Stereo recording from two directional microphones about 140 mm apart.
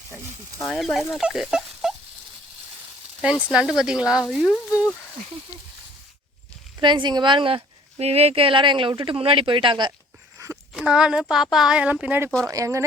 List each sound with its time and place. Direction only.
0.6 s speech: centre (ahead or behind)
3.4 s speech: 5° right (ahead or behind)
6.7 s speech: 35° right (ahead or behind)
10.3 s a sound: 20° right (ahead or behind)
10.8 s speech: 5° right (ahead or behind)
12.5 s speech: 25° right (ahead or behind)